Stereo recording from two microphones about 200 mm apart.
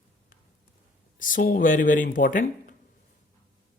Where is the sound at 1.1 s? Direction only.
40° left (ahead or behind).